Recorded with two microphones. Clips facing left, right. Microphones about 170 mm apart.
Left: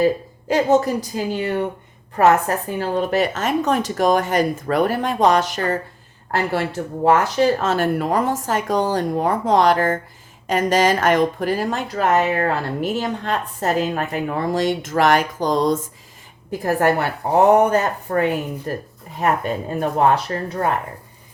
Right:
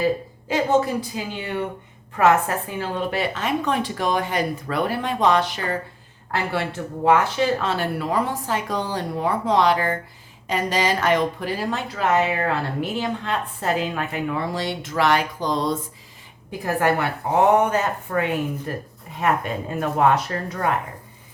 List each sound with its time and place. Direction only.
0.4 s speech: 40° left (ahead or behind)